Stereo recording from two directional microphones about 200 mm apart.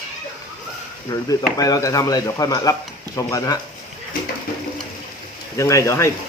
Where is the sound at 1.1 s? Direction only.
20° left (ahead or behind).